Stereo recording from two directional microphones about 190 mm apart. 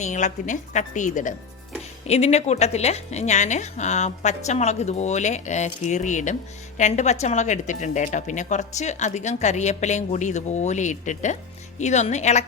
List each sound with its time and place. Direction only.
0.0 s speech: 40° left (ahead or behind)